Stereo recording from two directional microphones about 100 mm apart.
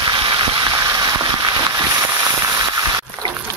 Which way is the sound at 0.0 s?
50° right (ahead or behind).